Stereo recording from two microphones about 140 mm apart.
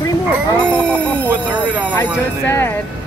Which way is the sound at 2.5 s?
15° left (ahead or behind).